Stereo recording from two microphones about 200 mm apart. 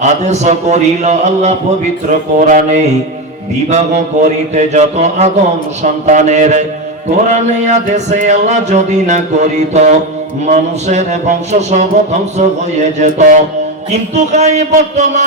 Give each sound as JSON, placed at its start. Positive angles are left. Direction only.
{"t": 0.0, "sound": "speech", "side_deg": -35}